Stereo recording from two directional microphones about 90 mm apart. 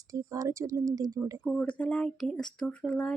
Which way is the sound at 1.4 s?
15° left (ahead or behind).